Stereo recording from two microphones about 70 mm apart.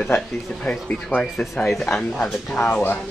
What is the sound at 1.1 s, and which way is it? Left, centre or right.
Speech, left.